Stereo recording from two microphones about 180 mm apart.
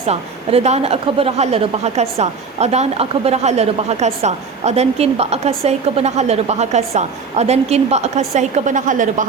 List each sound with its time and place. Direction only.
0.1 s a woman's voice: 35° right (ahead or behind)